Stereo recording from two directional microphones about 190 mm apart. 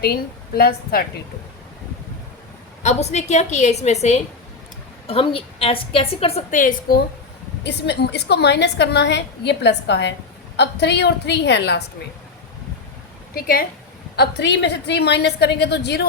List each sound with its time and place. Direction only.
0.0 s a woman's voice: 55° left (ahead or behind)
2.8 s a woman's voice: 35° left (ahead or behind)
7.6 s a woman's voice: 60° left (ahead or behind)
13.3 s a woman's voice: 50° left (ahead or behind)
14.2 s a woman's voice: 65° left (ahead or behind)